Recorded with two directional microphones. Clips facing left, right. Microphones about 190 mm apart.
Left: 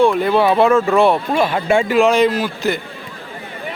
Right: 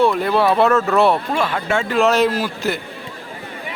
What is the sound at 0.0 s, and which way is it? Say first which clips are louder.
Speech: left 2 dB; centre (ahead or behind).